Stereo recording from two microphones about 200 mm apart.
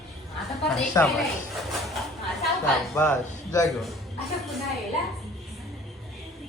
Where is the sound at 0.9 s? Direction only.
15° left (ahead or behind).